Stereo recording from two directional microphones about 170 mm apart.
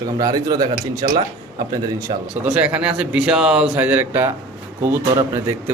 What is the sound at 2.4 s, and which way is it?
Speech, 10° right (ahead or behind).